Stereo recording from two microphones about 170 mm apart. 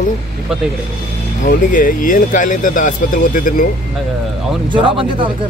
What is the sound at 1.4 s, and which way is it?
Speech, 50° left (ahead or behind).